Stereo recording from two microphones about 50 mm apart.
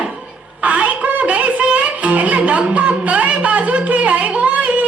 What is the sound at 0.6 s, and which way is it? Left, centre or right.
Music, right.